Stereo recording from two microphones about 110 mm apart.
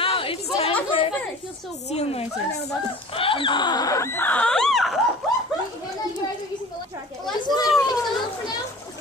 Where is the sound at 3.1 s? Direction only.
55° left (ahead or behind); by 5.0 s centre (ahead or behind).